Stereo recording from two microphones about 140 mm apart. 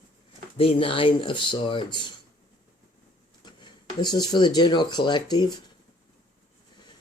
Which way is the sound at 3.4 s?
30° left (ahead or behind).